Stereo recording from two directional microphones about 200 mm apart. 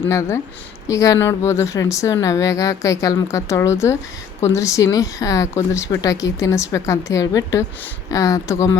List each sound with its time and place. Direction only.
0.0 s a woman's voice: 15° left (ahead or behind)